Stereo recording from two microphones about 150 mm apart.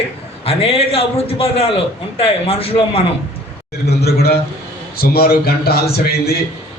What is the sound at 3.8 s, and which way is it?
A man's voice, 90° left.